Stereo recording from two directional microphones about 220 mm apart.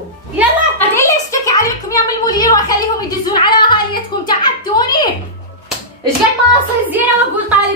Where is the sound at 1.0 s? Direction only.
15° left (ahead or behind).